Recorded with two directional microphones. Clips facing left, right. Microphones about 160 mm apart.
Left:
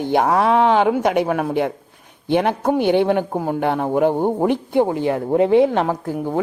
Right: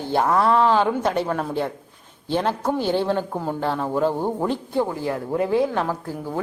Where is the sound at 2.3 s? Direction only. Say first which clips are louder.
Left 5 dB; 65° left (ahead or behind).